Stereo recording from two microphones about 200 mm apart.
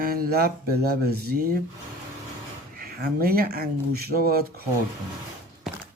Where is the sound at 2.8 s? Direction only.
50° right (ahead or behind).